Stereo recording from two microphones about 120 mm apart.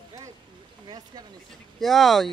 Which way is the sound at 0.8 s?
35° right (ahead or behind).